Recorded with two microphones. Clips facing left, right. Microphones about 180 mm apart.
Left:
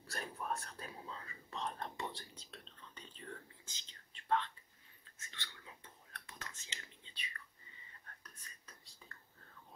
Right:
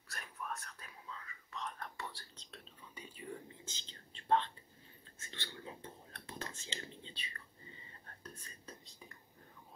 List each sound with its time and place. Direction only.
0.1 s whispering: 30° left (ahead or behind)
2.3 s whispering: 5° left (ahead or behind)
2.9 s whispering: 10° right (ahead or behind)
3.4 s whispering: 25° right (ahead or behind)